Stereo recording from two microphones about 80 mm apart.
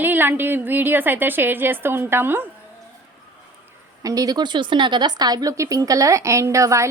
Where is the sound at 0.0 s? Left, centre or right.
Right.